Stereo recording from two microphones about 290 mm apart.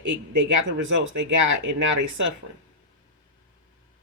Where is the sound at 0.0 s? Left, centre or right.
Right.